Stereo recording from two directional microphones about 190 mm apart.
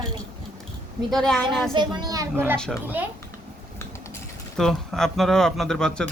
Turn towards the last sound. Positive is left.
turn(degrees=5)  # may be behind; listen again after turning